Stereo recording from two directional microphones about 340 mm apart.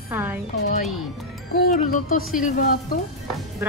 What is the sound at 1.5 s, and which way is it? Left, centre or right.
Speech, left.